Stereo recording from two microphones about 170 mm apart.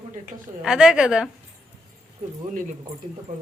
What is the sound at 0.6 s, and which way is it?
Speech, 5° right (ahead or behind).